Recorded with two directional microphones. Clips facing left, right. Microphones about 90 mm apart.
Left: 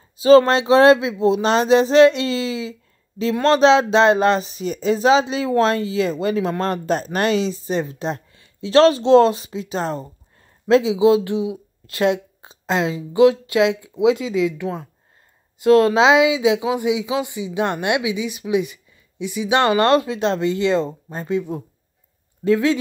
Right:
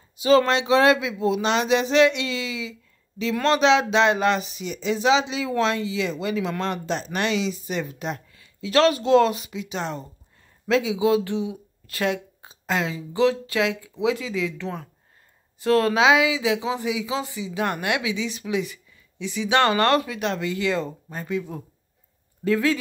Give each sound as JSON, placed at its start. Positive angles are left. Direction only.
{"t": 0.2, "sound": "speech", "side_deg": 35}
{"t": 10.7, "sound": "speech", "side_deg": 30}